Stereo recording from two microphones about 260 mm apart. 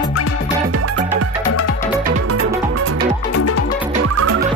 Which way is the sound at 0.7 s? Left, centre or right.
Right.